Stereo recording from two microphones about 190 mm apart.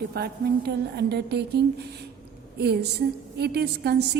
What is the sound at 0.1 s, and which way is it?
A woman's voice, 60° right (ahead or behind).